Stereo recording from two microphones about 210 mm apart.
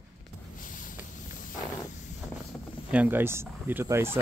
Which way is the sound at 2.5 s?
5° left (ahead or behind).